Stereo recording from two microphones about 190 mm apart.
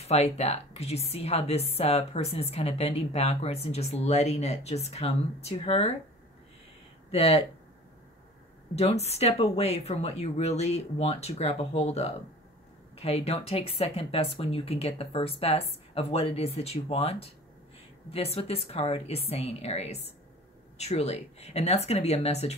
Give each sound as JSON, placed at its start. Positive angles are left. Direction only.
{"t": 0.0, "sound": "a woman's voice", "side_deg": 35}
{"t": 7.1, "sound": "speech", "side_deg": 35}
{"t": 8.7, "sound": "a woman's voice", "side_deg": 35}